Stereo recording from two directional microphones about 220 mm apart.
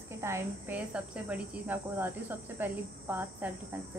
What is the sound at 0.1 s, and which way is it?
Speech, 10° right (ahead or behind).